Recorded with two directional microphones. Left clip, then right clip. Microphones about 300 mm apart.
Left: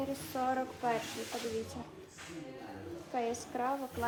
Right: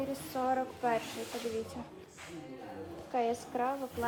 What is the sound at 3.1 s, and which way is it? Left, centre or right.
Speech, centre.